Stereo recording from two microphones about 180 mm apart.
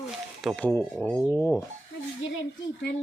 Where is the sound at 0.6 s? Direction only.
10° left (ahead or behind).